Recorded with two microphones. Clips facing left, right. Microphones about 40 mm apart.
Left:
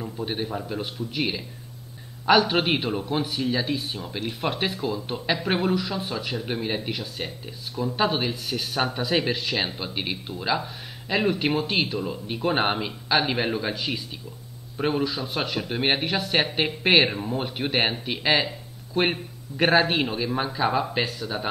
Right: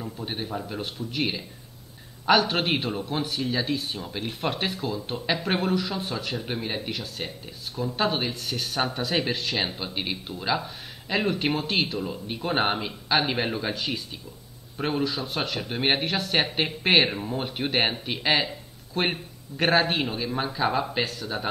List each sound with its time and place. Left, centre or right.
0.0 s speech: centre